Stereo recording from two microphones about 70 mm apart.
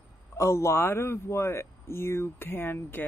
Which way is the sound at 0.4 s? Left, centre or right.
Left.